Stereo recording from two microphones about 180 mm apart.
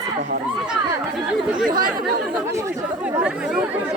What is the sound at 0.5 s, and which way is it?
Speech, 5° right (ahead or behind).